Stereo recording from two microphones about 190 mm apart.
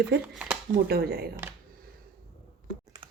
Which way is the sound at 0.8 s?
55° right (ahead or behind).